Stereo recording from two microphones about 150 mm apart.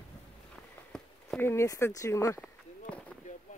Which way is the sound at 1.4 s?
15° left (ahead or behind).